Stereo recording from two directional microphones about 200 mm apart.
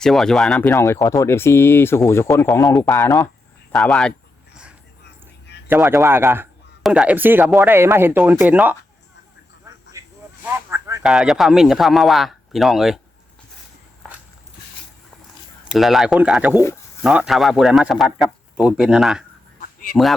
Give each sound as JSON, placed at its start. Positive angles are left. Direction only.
{"t": 0.0, "sound": "speech", "side_deg": 0}
{"t": 2.6, "sound": "a man's voice", "side_deg": 0}
{"t": 2.9, "sound": "speech", "side_deg": 15}
{"t": 3.7, "sound": "speech", "side_deg": 0}
{"t": 5.6, "sound": "speech", "side_deg": -15}
{"t": 10.0, "sound": "a sound", "side_deg": -15}
{"t": 11.0, "sound": "a man's voice", "side_deg": 0}
{"t": 15.7, "sound": "a man's voice", "side_deg": 0}
{"t": 19.6, "sound": "honk", "side_deg": 45}